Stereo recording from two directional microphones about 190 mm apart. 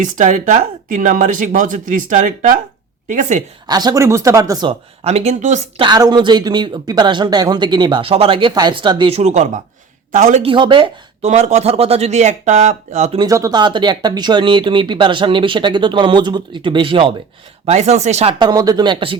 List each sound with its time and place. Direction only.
0.0 s speech: 40° right (ahead or behind)
3.7 s speech: 20° right (ahead or behind); by 10.5 s 40° right (ahead or behind)
10.5 s speech: 25° right (ahead or behind)
13.1 s speech: 20° right (ahead or behind)